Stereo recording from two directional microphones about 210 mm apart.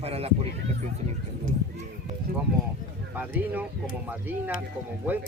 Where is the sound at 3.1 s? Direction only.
10° right (ahead or behind).